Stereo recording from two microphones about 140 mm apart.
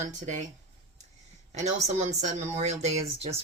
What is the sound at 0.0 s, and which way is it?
Speech, 60° right (ahead or behind).